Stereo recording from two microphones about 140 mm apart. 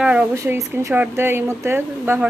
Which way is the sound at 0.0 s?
10° right (ahead or behind).